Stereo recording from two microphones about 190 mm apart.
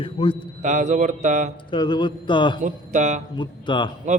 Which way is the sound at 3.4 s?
25° left (ahead or behind).